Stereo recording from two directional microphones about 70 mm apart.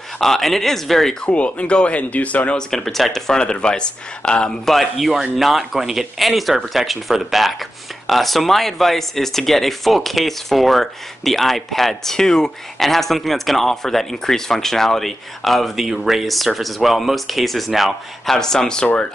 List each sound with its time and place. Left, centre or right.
0.2 s speech: centre
1.2 s speech: centre
2.7 s speech: centre